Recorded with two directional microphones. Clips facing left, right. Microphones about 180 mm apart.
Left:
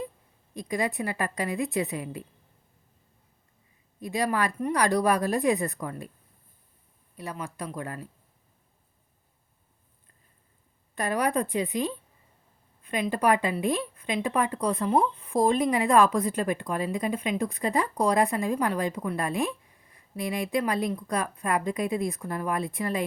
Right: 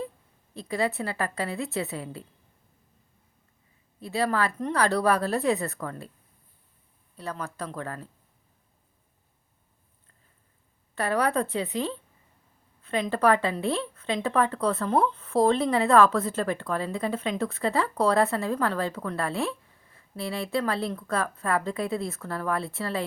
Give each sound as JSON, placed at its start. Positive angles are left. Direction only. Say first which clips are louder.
{"t": 0.5, "sound": "speech", "louder": "right 1 dB", "side_deg": 15}
{"t": 4.0, "sound": "speech", "louder": "right 1 dB", "side_deg": 15}
{"t": 7.2, "sound": "speech", "louder": "right 1 dB", "side_deg": 10}
{"t": 10.9, "sound": "speech", "louder": "right 1 dB", "side_deg": 15}